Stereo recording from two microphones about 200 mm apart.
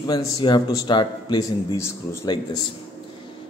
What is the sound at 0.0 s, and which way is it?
A man's voice, 20° left (ahead or behind).